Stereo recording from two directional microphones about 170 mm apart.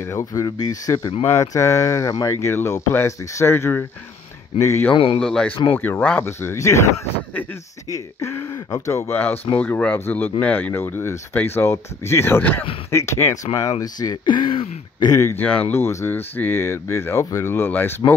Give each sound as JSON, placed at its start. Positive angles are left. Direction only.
{"t": 0.1, "sound": "speech", "side_deg": 20}
{"t": 4.9, "sound": "speech", "side_deg": 35}
{"t": 5.2, "sound": "speech", "side_deg": 5}
{"t": 7.9, "sound": "speech", "side_deg": 20}